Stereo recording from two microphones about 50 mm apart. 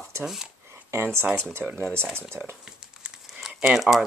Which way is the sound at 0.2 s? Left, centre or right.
Centre.